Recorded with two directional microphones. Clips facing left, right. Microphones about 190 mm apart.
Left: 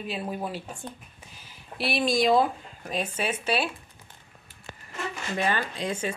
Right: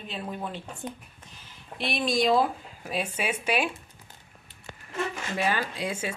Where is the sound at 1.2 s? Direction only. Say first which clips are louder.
Left 2 dB; 10° left (ahead or behind).